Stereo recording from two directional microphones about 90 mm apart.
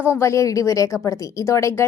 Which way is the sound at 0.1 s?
35° left (ahead or behind).